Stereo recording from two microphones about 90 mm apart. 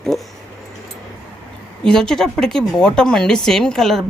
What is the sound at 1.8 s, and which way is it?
A woman's voice, 5° left (ahead or behind).